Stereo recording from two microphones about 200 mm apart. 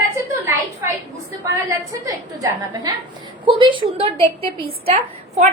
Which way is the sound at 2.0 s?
20° right (ahead or behind).